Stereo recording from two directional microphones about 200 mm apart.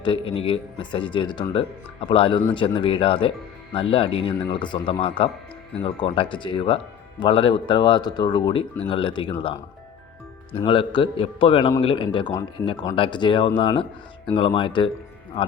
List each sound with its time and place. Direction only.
0.0 s speech: 25° left (ahead or behind)
10.5 s speech: 25° left (ahead or behind)